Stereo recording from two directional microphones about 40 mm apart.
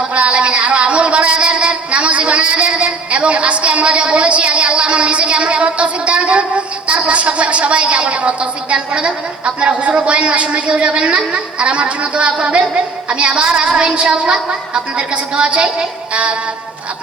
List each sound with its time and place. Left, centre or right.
0.1 s a sound: right
6.8 s a woman's voice: right
14.1 s a woman's voice: centre
14.9 s a woman's voice: right